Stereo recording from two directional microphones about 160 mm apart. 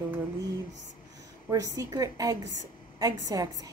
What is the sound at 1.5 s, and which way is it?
A woman's voice, 20° right (ahead or behind).